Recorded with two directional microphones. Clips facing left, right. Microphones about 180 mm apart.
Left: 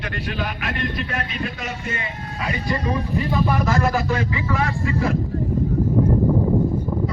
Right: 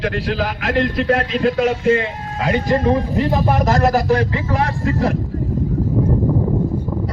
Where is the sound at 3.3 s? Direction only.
45° right (ahead or behind).